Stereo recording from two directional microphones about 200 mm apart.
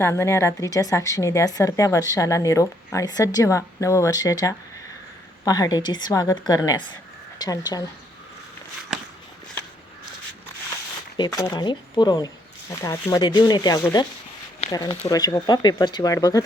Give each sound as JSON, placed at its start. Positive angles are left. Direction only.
{"t": 0.0, "sound": "a woman's voice", "side_deg": 15}
{"t": 11.2, "sound": "speech", "side_deg": 15}